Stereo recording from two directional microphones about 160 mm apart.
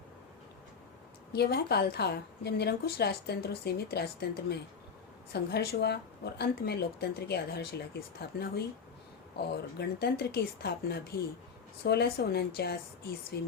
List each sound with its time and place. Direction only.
1.3 s a woman's voice: 90° left
9.5 s a woman's voice: 90° left